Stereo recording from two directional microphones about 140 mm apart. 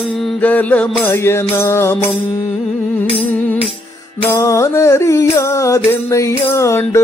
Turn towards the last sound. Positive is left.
turn(degrees=20)  # may be behind; listen again after turning